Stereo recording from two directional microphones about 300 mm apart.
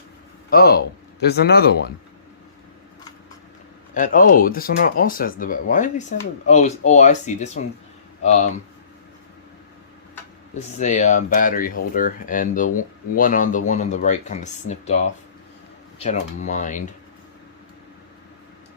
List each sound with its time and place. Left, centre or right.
0.5 s speech: left
3.9 s speech: left
10.8 s speech: left